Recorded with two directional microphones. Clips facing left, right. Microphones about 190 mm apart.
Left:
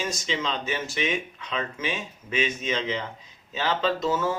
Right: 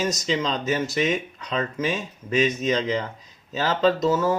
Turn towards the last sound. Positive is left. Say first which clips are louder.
# right 5 dB
turn(degrees=-40)  # may be behind; listen again after turning